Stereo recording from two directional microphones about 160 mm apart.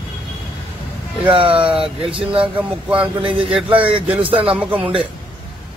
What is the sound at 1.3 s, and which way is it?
Speech, 35° right (ahead or behind).